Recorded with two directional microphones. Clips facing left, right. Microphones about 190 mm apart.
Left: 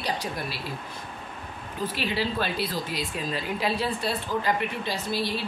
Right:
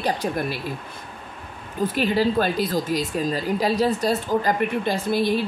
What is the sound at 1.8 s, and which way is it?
Speech, 45° right (ahead or behind).